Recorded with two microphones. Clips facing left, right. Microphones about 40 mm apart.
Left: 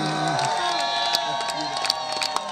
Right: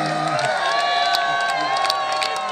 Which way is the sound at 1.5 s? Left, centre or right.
Right.